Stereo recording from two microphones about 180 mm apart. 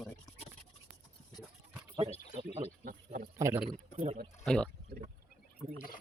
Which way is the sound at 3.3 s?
15° right (ahead or behind).